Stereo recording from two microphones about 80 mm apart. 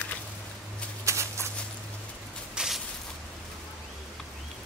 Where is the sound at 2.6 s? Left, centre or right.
Centre.